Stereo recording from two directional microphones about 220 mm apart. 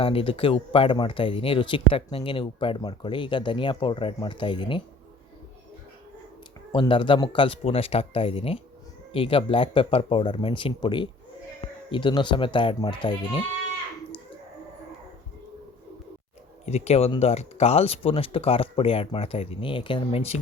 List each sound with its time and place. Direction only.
0.0 s speech: 25° left (ahead or behind)
6.7 s speech: 20° left (ahead or behind)
16.6 s speech: 30° left (ahead or behind)